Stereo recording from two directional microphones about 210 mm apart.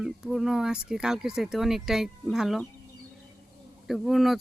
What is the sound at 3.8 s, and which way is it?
Speech, centre (ahead or behind).